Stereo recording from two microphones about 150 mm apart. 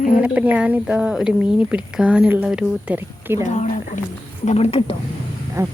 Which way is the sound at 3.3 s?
50° left (ahead or behind).